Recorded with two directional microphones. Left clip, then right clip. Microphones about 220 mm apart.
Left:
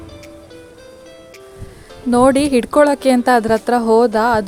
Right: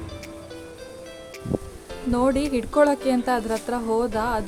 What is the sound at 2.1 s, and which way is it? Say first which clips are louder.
Speech: left 10 dB; 35° left (ahead or behind).